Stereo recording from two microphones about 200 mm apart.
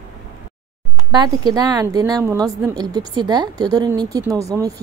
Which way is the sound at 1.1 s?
20° right (ahead or behind).